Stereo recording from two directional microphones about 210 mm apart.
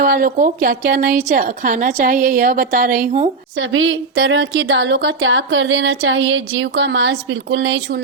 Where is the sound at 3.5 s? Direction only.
65° right (ahead or behind).